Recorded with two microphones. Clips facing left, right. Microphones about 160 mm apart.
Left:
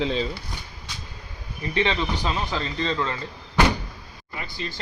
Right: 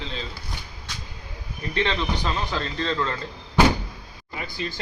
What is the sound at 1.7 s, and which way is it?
A man's voice, 10° left (ahead or behind).